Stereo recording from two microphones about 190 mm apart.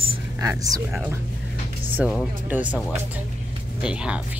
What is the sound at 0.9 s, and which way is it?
Speech, 5° right (ahead or behind).